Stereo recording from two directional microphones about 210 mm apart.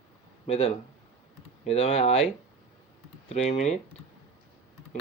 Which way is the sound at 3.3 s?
30° left (ahead or behind).